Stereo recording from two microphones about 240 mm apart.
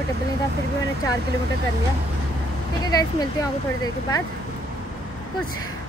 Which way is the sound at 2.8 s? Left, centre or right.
Centre.